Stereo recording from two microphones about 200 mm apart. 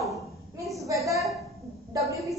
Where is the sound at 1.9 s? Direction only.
15° right (ahead or behind).